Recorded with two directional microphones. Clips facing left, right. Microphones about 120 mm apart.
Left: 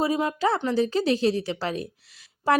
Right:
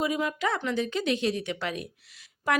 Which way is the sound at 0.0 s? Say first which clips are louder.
Left 4 dB; 35° left (ahead or behind).